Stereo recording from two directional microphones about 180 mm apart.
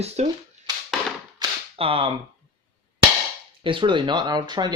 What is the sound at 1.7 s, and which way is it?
Speech, 30° right (ahead or behind).